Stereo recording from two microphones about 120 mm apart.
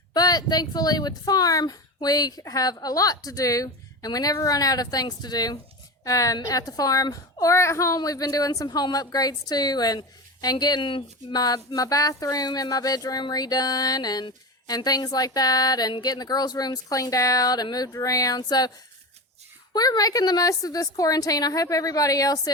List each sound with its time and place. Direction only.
0.1 s a child's voice: 35° left (ahead or behind)
19.7 s a child's voice: 35° left (ahead or behind)